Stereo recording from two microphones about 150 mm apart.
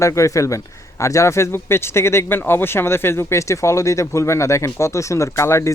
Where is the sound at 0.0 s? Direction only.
20° left (ahead or behind).